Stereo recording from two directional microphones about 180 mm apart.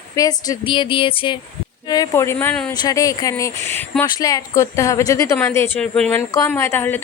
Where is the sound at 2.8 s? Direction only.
20° left (ahead or behind).